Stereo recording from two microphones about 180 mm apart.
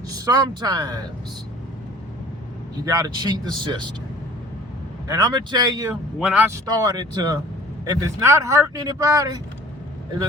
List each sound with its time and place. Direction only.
0.1 s speech: 20° right (ahead or behind)
2.8 s speech: 20° right (ahead or behind)
5.0 s speech: 20° right (ahead or behind)
5.9 s a man's voice: 10° right (ahead or behind)
6.7 s speech: 20° right (ahead or behind)